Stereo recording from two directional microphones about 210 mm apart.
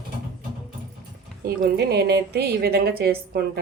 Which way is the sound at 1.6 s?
50° right (ahead or behind).